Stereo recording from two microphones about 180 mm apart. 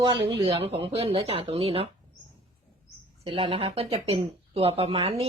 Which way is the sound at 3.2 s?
30° right (ahead or behind).